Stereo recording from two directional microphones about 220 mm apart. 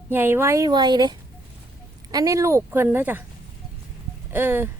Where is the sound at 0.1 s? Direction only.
10° right (ahead or behind).